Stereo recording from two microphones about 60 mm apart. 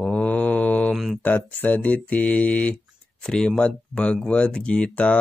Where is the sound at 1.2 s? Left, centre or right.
Left.